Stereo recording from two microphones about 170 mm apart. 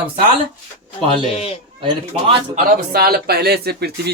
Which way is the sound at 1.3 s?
35° left (ahead or behind).